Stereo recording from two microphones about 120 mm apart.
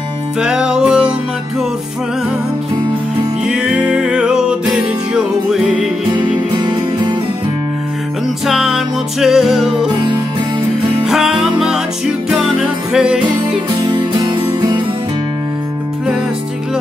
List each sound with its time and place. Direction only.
0.4 s music: 5° right (ahead or behind)
3.4 s music: 10° right (ahead or behind)
6.1 s music: 40° right (ahead or behind)
8.5 s music: centre (ahead or behind)
11.1 s music: 5° right (ahead or behind)
13.8 s music: 40° right (ahead or behind)